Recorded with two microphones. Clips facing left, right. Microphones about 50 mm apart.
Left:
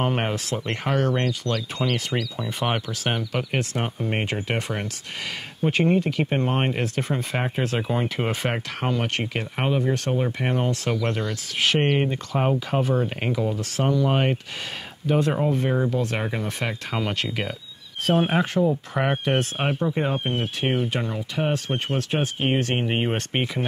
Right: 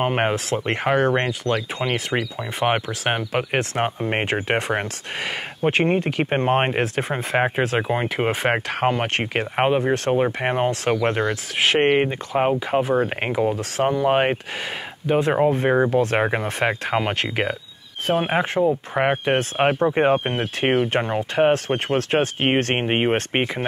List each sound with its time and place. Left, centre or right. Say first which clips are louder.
0.0 s speech: right 4 dB; right
13.0 s speech: right 4 dB; right
15.0 s speech: right 2 dB; right
15.3 s speech: right 5 dB; right